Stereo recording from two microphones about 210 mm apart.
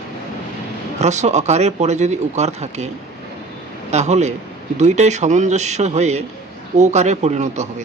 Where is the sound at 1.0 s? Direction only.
35° right (ahead or behind).